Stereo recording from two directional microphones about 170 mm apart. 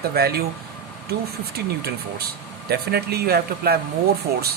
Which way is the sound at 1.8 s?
70° right (ahead or behind).